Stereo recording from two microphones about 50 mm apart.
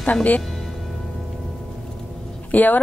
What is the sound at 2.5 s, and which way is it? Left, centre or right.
Speech, left.